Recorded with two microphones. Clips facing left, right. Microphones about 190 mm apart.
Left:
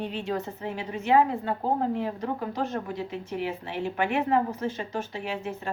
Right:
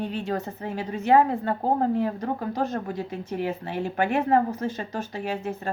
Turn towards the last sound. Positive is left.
turn(degrees=-40)  # may be behind; listen again after turning